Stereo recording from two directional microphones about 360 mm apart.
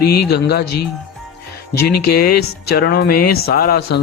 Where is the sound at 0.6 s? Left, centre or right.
Left.